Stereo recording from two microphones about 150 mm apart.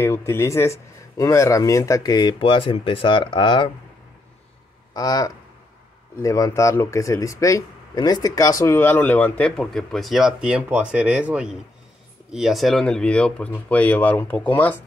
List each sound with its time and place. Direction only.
0.0 s speech: 15° left (ahead or behind); by 3.7 s 35° left (ahead or behind)
4.9 s speech: 25° left (ahead or behind); by 14.8 s 10° left (ahead or behind)